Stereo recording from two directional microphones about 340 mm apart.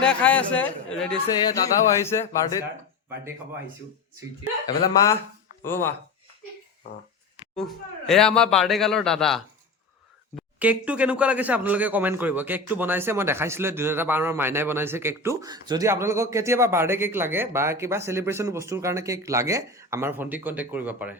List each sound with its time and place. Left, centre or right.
0.0 s a man's voice: centre
5.6 s speech: centre
7.5 s a man's voice: centre